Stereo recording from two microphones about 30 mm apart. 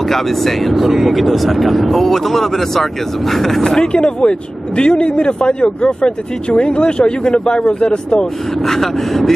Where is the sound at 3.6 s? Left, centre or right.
Left.